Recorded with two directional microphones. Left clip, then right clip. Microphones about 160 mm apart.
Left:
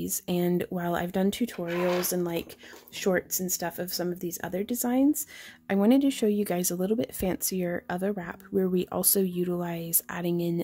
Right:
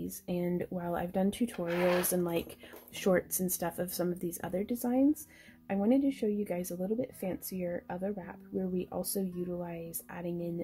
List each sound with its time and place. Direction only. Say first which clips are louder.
0.0 s speech: left 7 dB; 45° left (ahead or behind)
1.4 s speech: left 2 dB; 20° left (ahead or behind)
5.7 s speech: left 6 dB; 55° left (ahead or behind)